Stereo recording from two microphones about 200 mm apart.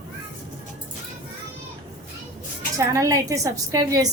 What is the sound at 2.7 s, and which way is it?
A woman's voice, 15° right (ahead or behind).